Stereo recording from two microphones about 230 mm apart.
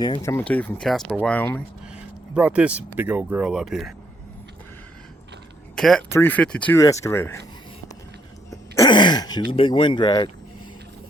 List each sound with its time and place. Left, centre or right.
0.0 s speech: centre
2.3 s speech: centre
5.7 s speech: centre
8.4 s throat clearing: centre
9.5 s speech: left